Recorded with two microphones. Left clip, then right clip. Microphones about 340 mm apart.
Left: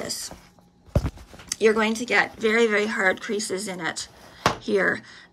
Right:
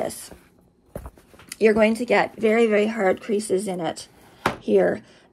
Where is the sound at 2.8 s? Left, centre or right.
Right.